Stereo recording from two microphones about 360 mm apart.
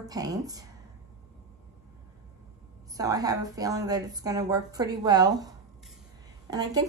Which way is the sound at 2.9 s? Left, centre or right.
Centre.